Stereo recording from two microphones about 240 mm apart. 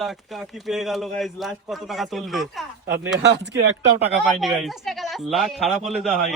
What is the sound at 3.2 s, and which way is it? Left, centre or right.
Speech, right.